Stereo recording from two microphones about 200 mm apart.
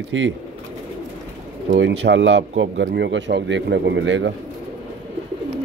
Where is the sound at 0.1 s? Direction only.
70° right (ahead or behind).